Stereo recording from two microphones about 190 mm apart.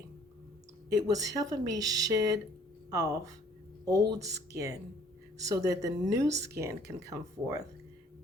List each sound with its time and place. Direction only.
0.9 s speech: 20° right (ahead or behind)